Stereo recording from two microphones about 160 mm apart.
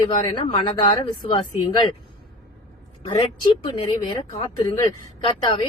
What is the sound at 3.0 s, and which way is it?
Speech, 25° left (ahead or behind).